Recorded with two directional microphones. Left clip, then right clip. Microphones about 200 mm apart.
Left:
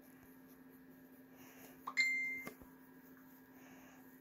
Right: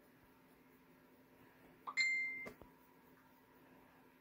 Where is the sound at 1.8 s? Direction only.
25° left (ahead or behind).